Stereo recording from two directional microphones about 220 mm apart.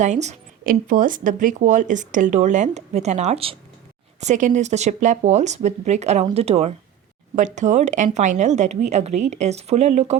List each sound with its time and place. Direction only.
0.0 s speech: 30° right (ahead or behind)